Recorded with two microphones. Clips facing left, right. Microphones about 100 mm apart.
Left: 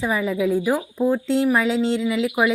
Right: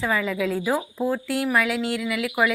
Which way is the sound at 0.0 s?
15° left (ahead or behind).